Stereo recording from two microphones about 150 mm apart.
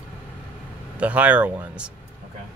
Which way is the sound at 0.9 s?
10° right (ahead or behind).